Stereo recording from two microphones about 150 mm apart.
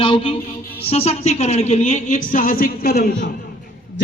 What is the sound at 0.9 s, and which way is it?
A woman's voice, 45° left (ahead or behind).